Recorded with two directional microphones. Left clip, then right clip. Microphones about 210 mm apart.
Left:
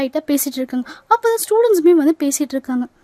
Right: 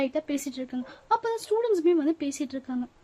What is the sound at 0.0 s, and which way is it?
A child's voice, 50° left (ahead or behind).